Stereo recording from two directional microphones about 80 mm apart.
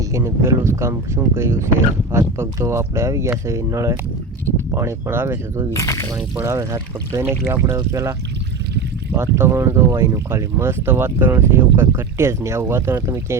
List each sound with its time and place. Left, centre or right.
0.0 s speech: right
5.7 s speech: left
6.4 s speech: right
9.1 s speech: right